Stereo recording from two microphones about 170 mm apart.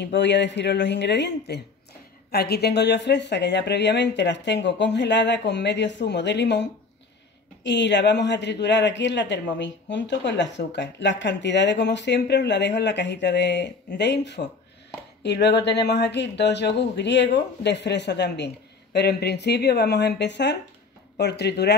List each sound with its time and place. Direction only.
0.0 s speech: 90° left
2.3 s speech: 70° left (ahead or behind); by 18.5 s 85° left
18.9 s speech: 75° left (ahead or behind); by 20.5 s 90° left
21.2 s speech: 75° left (ahead or behind)